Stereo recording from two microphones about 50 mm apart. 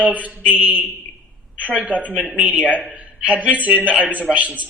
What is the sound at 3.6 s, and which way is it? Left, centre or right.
A man's voice, right.